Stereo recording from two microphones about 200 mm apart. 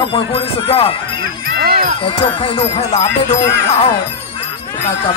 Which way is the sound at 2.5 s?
35° left (ahead or behind).